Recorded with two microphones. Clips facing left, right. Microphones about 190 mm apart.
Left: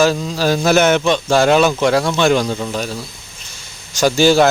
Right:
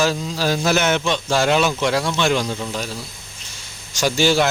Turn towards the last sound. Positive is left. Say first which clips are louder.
# left 6 dB
turn(degrees=45)  # may be behind; listen again after turning